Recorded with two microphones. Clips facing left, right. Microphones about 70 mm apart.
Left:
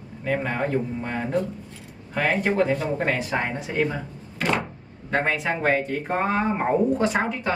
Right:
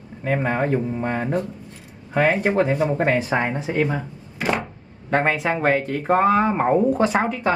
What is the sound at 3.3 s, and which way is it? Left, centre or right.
Speech, right.